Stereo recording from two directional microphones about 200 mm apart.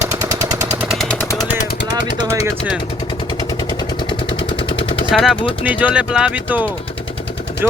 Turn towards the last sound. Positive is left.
turn(degrees=-5)  # may be behind; listen again after turning